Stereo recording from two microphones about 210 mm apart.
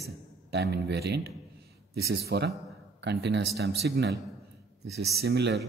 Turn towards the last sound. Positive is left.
turn(degrees=-50)  # may be behind; listen again after turning